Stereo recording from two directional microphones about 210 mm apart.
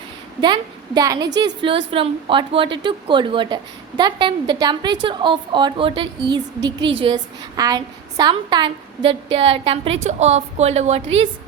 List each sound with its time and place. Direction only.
0.4 s a woman's voice: 20° right (ahead or behind)